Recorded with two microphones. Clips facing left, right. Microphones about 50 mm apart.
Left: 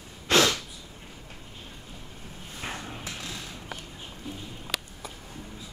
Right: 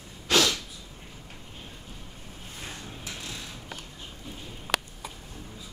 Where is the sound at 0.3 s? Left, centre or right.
Left.